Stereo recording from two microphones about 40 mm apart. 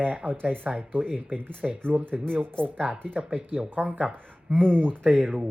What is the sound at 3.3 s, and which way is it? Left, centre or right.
Speech, right.